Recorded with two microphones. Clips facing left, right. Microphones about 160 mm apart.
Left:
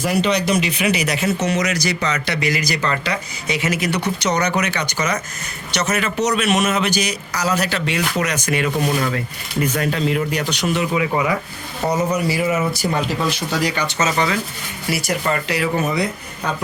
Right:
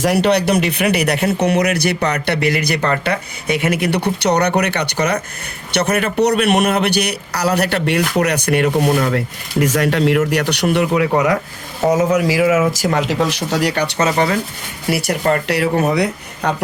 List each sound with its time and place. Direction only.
0.0 s a man's voice: 65° right (ahead or behind)
11.9 s a man's voice: 90° right; by 16.6 s 70° right (ahead or behind)